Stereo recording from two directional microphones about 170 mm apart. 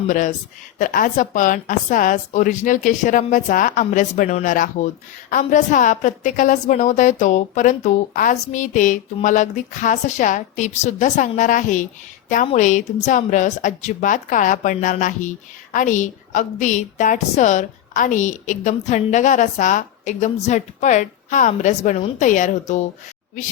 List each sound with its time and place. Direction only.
0.1 s a woman's voice: 50° left (ahead or behind)